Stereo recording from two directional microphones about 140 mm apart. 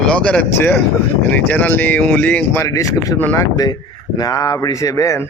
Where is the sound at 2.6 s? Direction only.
25° left (ahead or behind).